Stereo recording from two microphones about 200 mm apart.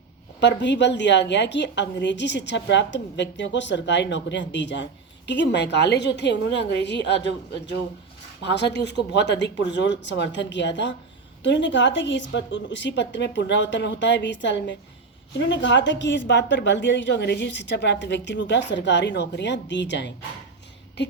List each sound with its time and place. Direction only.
0.3 s a woman's voice: 60° left (ahead or behind)